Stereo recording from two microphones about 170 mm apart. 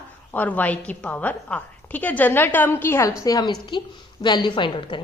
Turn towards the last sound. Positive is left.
turn(degrees=30)  # may be behind; listen again after turning